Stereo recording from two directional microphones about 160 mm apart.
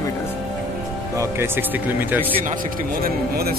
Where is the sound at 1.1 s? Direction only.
15° right (ahead or behind).